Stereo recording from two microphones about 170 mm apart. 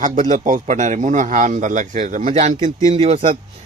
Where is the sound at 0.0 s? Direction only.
50° right (ahead or behind).